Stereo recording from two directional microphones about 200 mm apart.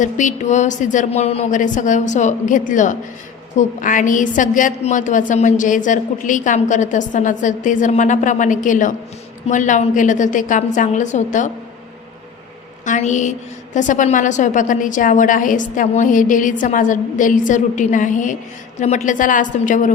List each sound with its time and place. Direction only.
0.0 s a woman's voice: 40° left (ahead or behind)
12.8 s a woman's voice: 40° left (ahead or behind)